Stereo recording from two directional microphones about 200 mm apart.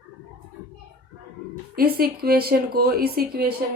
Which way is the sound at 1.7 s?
50° right (ahead or behind).